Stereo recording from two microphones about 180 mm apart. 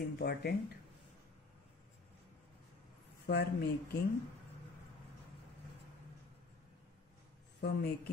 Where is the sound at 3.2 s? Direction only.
65° left (ahead or behind).